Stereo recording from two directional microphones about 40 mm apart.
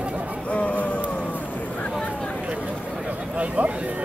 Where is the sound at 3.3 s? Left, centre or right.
Right.